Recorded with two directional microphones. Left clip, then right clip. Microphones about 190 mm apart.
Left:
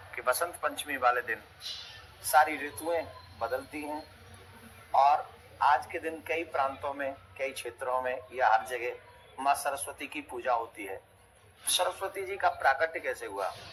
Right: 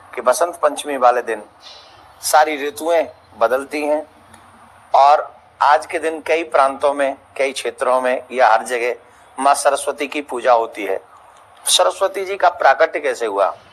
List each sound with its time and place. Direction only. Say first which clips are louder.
0.1 s a man's voice: right 14 dB; 45° right (ahead or behind)